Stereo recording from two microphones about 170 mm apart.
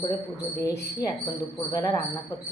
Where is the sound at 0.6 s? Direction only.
15° left (ahead or behind).